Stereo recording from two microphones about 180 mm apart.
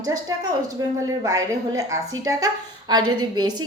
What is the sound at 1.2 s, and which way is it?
A woman's voice, 20° right (ahead or behind).